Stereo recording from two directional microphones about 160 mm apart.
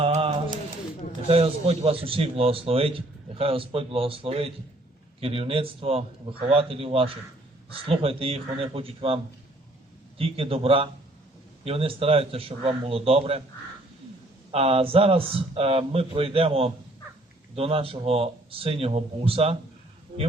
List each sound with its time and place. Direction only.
0.0 s pigeon: 40° right (ahead or behind)
1.3 s speech: 40° right (ahead or behind)
14.5 s speech: 35° right (ahead or behind)